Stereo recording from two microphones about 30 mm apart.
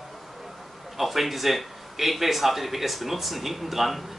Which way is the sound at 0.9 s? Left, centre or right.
Centre.